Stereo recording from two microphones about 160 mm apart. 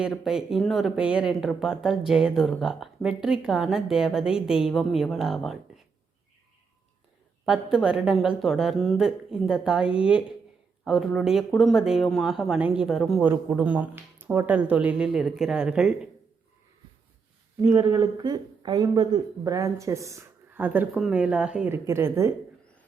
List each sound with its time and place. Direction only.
0.0 s speech: centre (ahead or behind)
7.4 s speech: 5° right (ahead or behind)
13.2 s speech: 10° right (ahead or behind)
17.6 s speech: 20° right (ahead or behind)
19.5 s speech: 20° right (ahead or behind)